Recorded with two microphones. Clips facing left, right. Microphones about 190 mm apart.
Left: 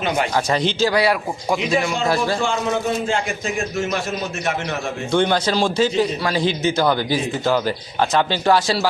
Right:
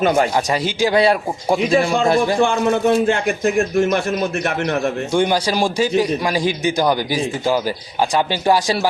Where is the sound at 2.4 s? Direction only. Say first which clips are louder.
Right 5 dB; 55° right (ahead or behind).